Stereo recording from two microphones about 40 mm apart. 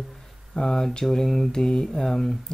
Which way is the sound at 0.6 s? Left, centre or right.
Centre.